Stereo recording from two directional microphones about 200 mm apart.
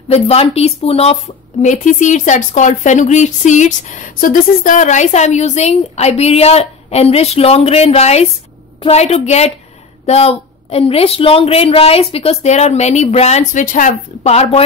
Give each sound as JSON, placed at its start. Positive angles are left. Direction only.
{"t": 0.1, "sound": "speech", "side_deg": 30}